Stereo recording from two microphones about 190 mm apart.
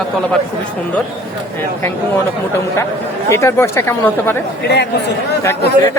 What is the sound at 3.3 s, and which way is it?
Speech, 15° left (ahead or behind).